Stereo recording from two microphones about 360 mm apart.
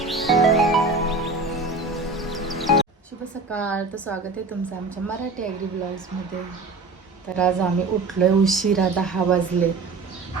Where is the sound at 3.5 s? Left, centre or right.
Centre.